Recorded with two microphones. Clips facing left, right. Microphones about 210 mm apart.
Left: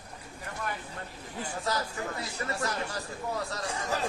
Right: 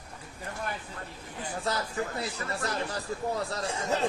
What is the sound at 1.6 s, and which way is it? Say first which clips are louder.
Speech: right 2 dB; 30° right (ahead or behind).